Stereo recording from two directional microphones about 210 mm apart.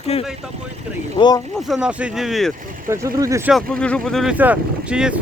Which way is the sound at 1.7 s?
5° right (ahead or behind).